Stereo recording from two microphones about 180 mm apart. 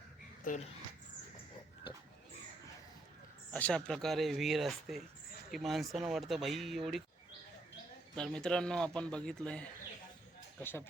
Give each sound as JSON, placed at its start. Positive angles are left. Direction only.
{"t": 0.4, "sound": "speech", "side_deg": 45}
{"t": 3.5, "sound": "a man's voice", "side_deg": 5}
{"t": 8.1, "sound": "a man's voice", "side_deg": 5}